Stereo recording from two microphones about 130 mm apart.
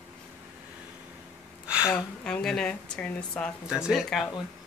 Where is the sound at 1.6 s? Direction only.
10° right (ahead or behind).